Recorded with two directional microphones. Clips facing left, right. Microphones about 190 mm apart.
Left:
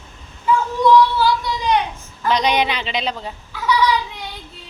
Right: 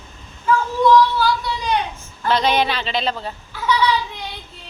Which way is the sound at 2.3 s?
15° left (ahead or behind).